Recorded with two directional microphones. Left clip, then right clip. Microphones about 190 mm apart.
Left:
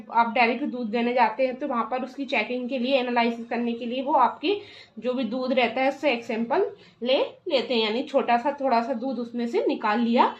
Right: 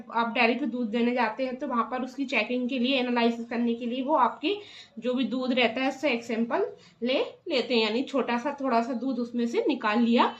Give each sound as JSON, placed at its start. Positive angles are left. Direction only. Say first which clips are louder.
{"t": 0.1, "sound": "a woman's voice", "louder": "left 4 dB", "side_deg": 25}